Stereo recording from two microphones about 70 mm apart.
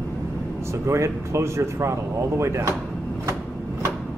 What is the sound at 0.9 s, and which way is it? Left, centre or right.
Speech, right.